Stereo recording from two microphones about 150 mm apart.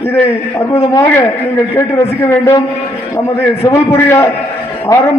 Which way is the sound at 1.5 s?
15° left (ahead or behind).